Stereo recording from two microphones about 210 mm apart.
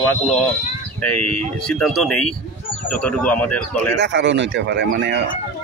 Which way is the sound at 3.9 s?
55° right (ahead or behind).